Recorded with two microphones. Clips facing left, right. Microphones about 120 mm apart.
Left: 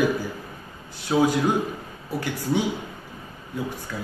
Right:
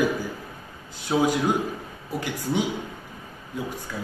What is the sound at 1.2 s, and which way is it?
Speech, 15° right (ahead or behind).